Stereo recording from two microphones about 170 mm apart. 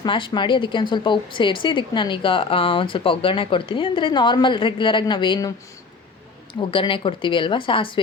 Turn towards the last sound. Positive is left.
turn(degrees=30)  # may be behind; listen again after turning